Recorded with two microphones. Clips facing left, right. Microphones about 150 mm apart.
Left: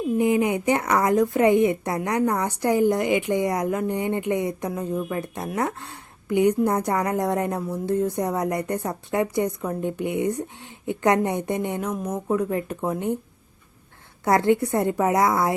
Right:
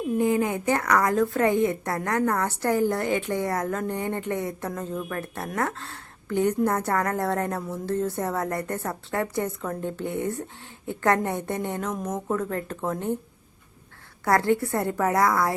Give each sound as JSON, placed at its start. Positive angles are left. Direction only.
{"t": 0.2, "sound": "speech", "side_deg": 20}
{"t": 14.3, "sound": "a woman's voice", "side_deg": 20}